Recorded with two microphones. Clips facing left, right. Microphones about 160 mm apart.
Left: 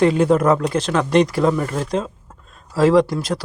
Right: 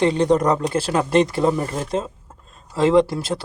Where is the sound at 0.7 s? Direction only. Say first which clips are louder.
Left 1 dB; 35° right (ahead or behind).